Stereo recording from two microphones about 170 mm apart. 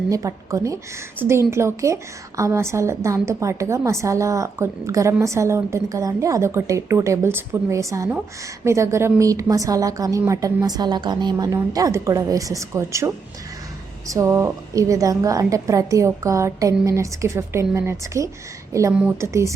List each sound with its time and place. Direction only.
0.1 s a woman's voice: 20° right (ahead or behind)
14.1 s a woman's voice: 15° right (ahead or behind)